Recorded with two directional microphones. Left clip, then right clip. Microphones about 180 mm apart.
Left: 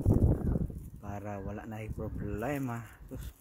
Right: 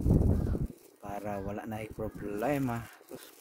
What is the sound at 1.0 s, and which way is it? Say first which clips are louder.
Speech: right 4 dB; 20° right (ahead or behind).